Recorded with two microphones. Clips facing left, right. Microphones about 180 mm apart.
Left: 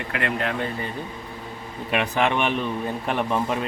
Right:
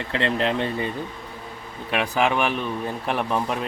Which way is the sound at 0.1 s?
25° right (ahead or behind).